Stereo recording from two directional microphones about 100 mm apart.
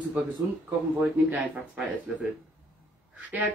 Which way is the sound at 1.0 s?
15° right (ahead or behind).